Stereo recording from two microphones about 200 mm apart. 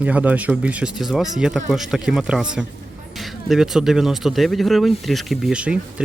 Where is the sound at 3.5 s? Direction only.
Centre (ahead or behind).